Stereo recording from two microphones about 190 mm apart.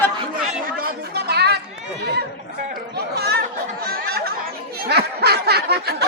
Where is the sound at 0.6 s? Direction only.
50° right (ahead or behind).